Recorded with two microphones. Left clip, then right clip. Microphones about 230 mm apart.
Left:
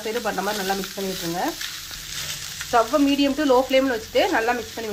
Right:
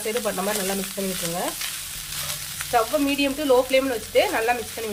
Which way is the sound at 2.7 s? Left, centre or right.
Centre.